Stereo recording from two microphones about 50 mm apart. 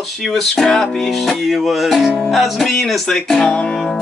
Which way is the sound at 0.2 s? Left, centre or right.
Centre.